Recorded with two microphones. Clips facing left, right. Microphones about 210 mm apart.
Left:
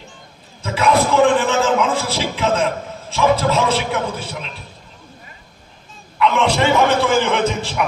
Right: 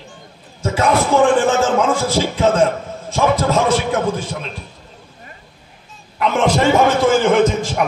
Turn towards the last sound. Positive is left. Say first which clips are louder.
# right 5 dB
turn(degrees=-45)  # may be behind; listen again after turning